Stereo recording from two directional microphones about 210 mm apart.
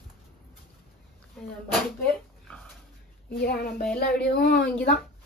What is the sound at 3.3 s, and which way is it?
Speech, 50° left (ahead or behind).